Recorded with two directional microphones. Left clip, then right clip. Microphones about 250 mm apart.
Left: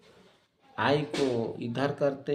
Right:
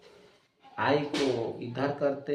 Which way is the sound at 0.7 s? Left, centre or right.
Left.